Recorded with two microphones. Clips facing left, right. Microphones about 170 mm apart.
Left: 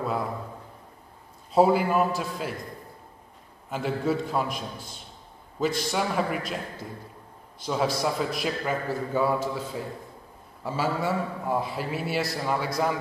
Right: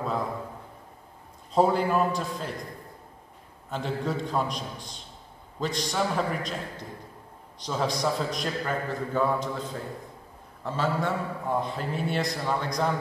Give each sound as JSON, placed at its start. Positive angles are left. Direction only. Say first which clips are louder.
{"t": 1.5, "sound": "a man's voice", "louder": "left 2 dB", "side_deg": 5}
{"t": 3.7, "sound": "a man's voice", "louder": "left 3 dB", "side_deg": 5}